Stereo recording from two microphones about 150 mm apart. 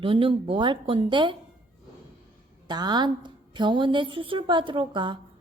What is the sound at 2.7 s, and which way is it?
A woman's voice, 30° right (ahead or behind).